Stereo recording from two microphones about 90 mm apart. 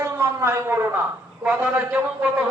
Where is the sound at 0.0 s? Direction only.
30° right (ahead or behind).